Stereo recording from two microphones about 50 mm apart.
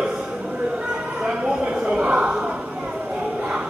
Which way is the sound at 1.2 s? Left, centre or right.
Right.